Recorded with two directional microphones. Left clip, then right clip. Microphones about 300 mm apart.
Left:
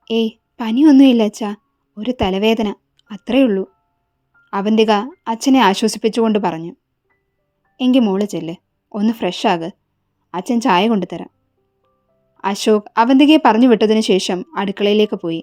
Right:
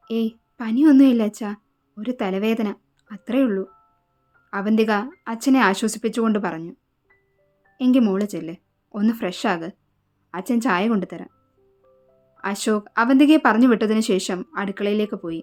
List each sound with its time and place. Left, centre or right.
0.0 s a woman's voice: centre
7.8 s speech: centre
12.4 s speech: centre